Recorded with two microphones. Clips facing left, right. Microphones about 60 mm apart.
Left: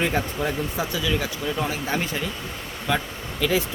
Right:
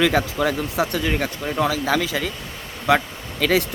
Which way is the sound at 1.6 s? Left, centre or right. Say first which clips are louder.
Right 5 dB; right.